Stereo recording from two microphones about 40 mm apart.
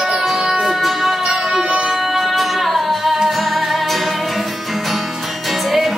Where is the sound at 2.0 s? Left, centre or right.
Centre.